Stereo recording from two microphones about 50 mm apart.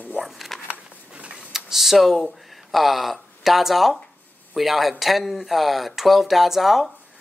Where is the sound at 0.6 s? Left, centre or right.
Right.